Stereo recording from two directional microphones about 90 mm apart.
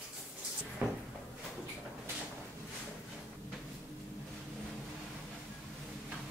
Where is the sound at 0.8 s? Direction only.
15° right (ahead or behind).